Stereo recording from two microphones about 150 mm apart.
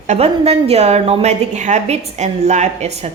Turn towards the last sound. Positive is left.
turn(degrees=-45)  # may be behind; listen again after turning